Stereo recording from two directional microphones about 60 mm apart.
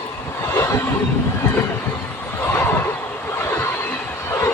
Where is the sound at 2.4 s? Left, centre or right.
Left.